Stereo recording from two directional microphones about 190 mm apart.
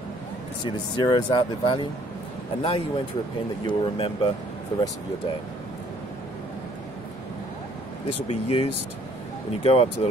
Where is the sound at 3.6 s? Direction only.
25° left (ahead or behind).